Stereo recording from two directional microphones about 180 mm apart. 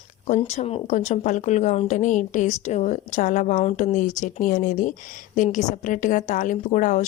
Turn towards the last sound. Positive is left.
turn(degrees=40)  # may be behind; listen again after turning